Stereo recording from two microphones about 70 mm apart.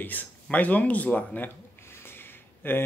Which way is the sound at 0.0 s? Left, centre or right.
Left.